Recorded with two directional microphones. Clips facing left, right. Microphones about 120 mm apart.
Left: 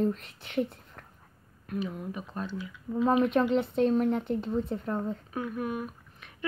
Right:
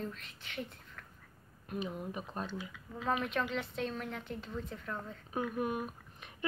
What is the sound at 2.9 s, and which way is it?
Speech, 30° left (ahead or behind).